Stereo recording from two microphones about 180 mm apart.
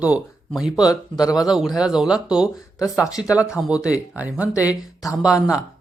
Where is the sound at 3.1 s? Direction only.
20° left (ahead or behind).